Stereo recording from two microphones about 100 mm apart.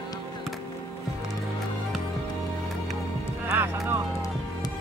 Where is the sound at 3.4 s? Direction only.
20° right (ahead or behind).